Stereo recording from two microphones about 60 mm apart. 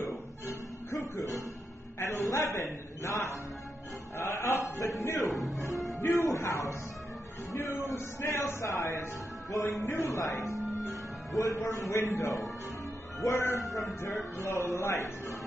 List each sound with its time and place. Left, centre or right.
0.9 s music: left
3.0 s music: left
4.2 s chant: left
5.0 s music: left
5.9 s music: left
6.1 s music: left
7.9 s a sound: left
8.7 s music: left
11.3 s a man's voice: left